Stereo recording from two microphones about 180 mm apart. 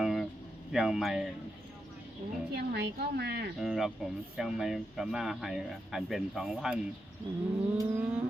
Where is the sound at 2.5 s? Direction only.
65° right (ahead or behind).